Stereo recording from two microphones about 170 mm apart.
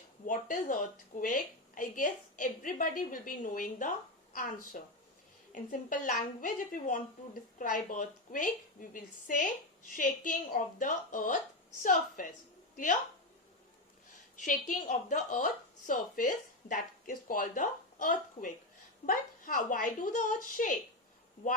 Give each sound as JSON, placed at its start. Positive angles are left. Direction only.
{"t": 0.3, "sound": "a woman's voice", "side_deg": 50}
{"t": 14.3, "sound": "a woman's voice", "side_deg": 45}